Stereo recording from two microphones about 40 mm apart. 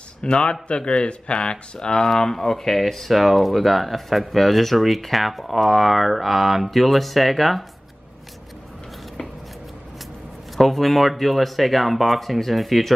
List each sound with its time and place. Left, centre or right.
0.2 s speech: left
2.0 s speech: centre
10.6 s speech: centre